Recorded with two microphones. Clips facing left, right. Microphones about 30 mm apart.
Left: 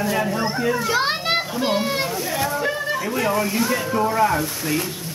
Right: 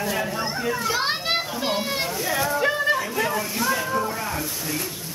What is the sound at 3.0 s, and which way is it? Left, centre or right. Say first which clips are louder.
Speech: left 4 dB; centre.